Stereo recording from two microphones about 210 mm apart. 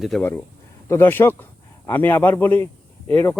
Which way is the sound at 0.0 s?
5° left (ahead or behind).